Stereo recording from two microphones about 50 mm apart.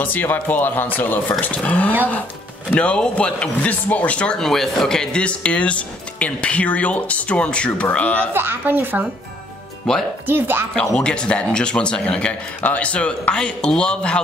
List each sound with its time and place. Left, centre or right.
0.0 s speech: left
1.4 s speech: left
4.4 s speech: centre; by 8.3 s left
8.3 s a woman's voice: right
9.9 s speech: centre
10.2 s a woman's voice: right
10.7 s speech: centre